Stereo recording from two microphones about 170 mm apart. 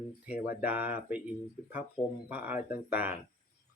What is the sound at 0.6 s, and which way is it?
Speech, 10° right (ahead or behind).